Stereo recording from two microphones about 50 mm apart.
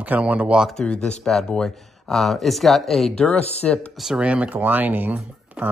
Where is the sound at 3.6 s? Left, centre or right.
Left.